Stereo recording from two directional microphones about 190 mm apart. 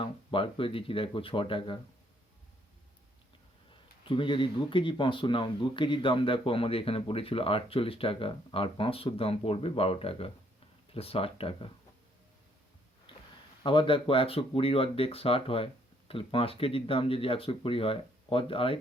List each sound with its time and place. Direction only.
0.0 s speech: 30° left (ahead or behind)
3.7 s speech: 25° left (ahead or behind)
13.1 s a sound: 25° left (ahead or behind)
13.6 s speech: 25° left (ahead or behind)